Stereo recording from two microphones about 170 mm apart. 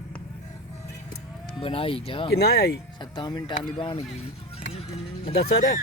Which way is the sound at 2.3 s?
65° left (ahead or behind).